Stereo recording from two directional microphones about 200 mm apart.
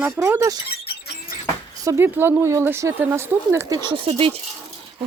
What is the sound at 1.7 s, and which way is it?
Speech, 15° right (ahead or behind).